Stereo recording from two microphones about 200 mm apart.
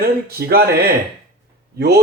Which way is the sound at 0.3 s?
50° right (ahead or behind).